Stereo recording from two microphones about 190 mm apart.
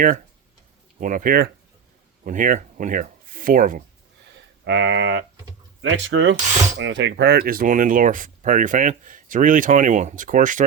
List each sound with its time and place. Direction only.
0.9 s speech: 45° right (ahead or behind)
4.6 s speech: 65° right (ahead or behind); by 10.6 s 45° right (ahead or behind)